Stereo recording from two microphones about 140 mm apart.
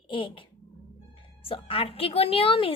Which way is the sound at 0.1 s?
40° left (ahead or behind).